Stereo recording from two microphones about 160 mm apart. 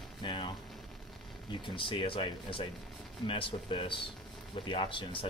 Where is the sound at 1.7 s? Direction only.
30° left (ahead or behind).